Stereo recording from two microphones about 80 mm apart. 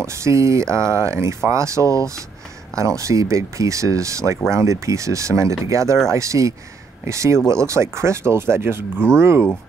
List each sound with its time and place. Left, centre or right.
0.0 s speech: right